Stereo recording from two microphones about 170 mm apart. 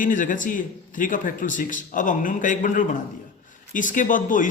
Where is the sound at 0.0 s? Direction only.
50° left (ahead or behind).